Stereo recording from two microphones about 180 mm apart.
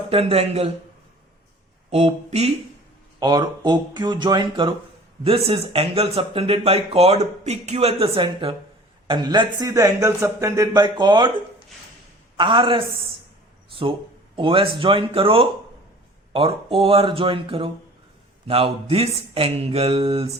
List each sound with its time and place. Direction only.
0.1 s speech: 30° right (ahead or behind)
1.9 s speech: 35° right (ahead or behind)
3.2 s a man's voice: 25° right (ahead or behind)
12.4 s a man's voice: 25° right (ahead or behind)
14.3 s a man's voice: 30° right (ahead or behind)